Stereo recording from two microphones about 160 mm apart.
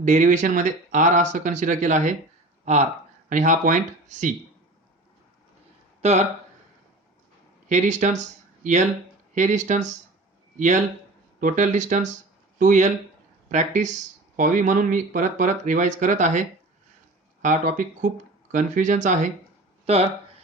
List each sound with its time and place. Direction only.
0.0 s speech: 50° right (ahead or behind)
6.0 s speech: 45° right (ahead or behind)
7.7 s speech: 50° right (ahead or behind)
9.3 s speech: 50° right (ahead or behind)